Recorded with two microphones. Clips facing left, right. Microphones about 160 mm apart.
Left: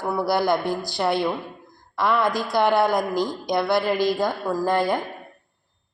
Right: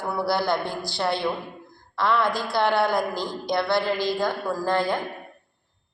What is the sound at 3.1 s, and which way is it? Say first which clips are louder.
Speech: left 4 dB; 45° left (ahead or behind).